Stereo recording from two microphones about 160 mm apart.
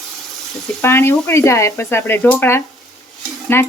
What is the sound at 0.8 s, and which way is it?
Speech, 15° left (ahead or behind).